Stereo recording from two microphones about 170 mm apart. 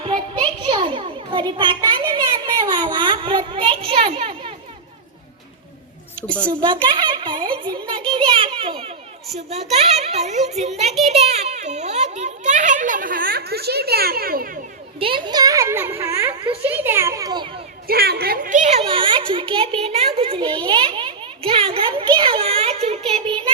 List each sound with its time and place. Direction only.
0.0 s children playing: 25° right (ahead or behind)
6.2 s a woman's voice: 5° left (ahead or behind)
6.8 s a child's voice: 30° right (ahead or behind)
8.1 s children playing: 30° right (ahead or behind)
9.7 s a child's voice: 40° right (ahead or behind); by 14.6 s 60° right (ahead or behind)
14.9 s a child's voice: 30° right (ahead or behind)
17.8 s a child's voice: 70° right (ahead or behind); by 23.5 s 30° right (ahead or behind)